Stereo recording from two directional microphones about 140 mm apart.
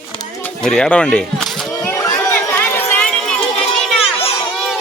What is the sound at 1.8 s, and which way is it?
Run, 20° left (ahead or behind).